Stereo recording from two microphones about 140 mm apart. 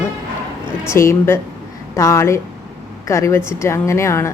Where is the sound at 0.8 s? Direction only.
20° left (ahead or behind).